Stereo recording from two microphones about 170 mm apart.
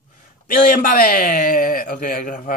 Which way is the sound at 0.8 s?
55° left (ahead or behind).